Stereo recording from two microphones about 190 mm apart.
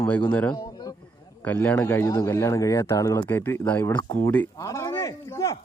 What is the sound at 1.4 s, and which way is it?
Speech, 10° left (ahead or behind).